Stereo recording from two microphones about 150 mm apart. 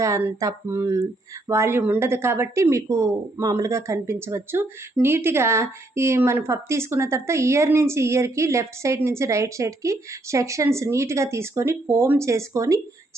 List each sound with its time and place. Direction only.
0.0 s speech: 20° right (ahead or behind)